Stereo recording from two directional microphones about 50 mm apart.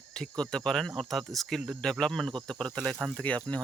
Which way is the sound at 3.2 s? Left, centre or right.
Left.